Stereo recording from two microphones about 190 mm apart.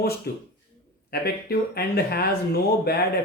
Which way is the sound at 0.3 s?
60° left (ahead or behind).